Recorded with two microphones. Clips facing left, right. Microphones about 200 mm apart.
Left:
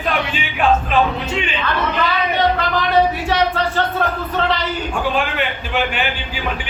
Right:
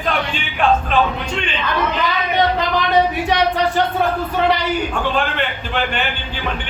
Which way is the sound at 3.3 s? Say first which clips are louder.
Right 1 dB; 15° right (ahead or behind).